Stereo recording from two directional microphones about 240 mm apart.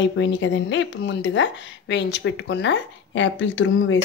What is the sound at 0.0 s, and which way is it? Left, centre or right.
Speech, left.